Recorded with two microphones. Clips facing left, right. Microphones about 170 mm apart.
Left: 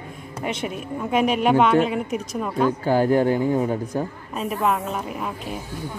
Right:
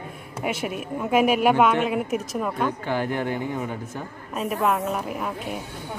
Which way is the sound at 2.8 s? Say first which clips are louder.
Left 7 dB; 40° left (ahead or behind).